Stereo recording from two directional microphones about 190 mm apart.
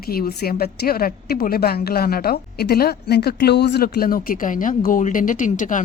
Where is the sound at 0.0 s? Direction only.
50° left (ahead or behind).